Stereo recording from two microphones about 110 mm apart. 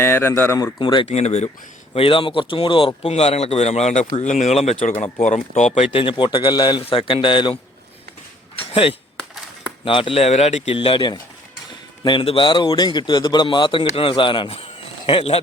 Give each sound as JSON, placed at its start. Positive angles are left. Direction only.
{"t": 0.0, "sound": "speech", "side_deg": 20}
{"t": 0.6, "sound": "speech", "side_deg": 40}
{"t": 1.0, "sound": "speech", "side_deg": 75}
{"t": 1.9, "sound": "speech", "side_deg": 50}
{"t": 5.9, "sound": "a man's voice", "side_deg": 55}
{"t": 6.8, "sound": "a man's voice", "side_deg": 55}
{"t": 8.7, "sound": "speech", "side_deg": 60}
{"t": 10.8, "sound": "a man's voice", "side_deg": 50}
{"t": 14.5, "sound": "a sound", "side_deg": 55}